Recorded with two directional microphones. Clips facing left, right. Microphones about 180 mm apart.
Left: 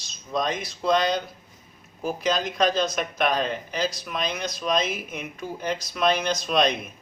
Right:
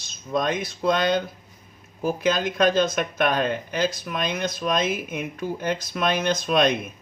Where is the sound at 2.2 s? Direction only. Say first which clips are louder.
Right 2 dB; 55° right (ahead or behind).